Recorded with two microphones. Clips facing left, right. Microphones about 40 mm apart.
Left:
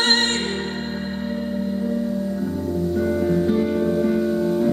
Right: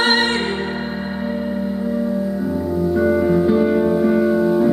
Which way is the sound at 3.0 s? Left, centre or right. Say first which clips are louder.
Right 5 dB; centre.